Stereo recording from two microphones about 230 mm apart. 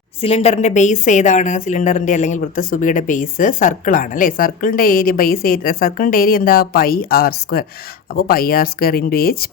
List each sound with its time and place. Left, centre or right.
0.2 s a woman's voice: left